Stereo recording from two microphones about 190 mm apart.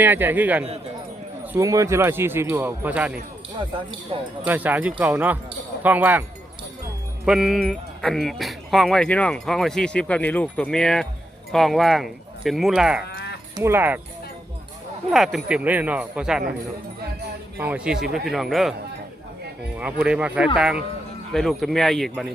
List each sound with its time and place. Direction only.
0.0 s speech: 10° right (ahead or behind)
3.6 s speech: 25° right (ahead or behind)
4.4 s speech: 10° right (ahead or behind)
7.3 s speech: centre (ahead or behind)
13.1 s a sound: 60° left (ahead or behind)
13.6 s speech: 10° right (ahead or behind)
15.1 s speech: centre (ahead or behind)
17.6 s speech: 5° right (ahead or behind)
19.8 s speech: 5° right (ahead or behind)